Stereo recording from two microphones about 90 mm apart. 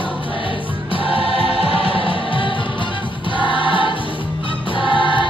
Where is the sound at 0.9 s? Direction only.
90° left.